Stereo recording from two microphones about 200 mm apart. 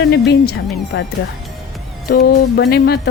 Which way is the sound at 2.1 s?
50° left (ahead or behind).